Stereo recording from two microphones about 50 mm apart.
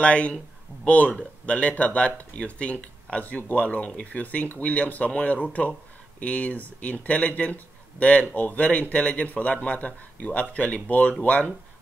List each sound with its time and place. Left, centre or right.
0.0 s speech: left